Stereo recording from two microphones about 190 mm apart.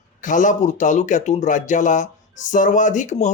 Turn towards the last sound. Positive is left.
turn(degrees=40)  # may be behind; listen again after turning